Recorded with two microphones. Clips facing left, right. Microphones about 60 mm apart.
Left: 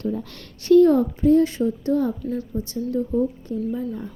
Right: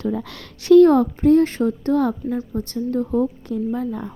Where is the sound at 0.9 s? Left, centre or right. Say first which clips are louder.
Right 2 dB; right.